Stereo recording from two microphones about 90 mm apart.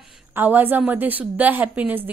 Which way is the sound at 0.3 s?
20° right (ahead or behind).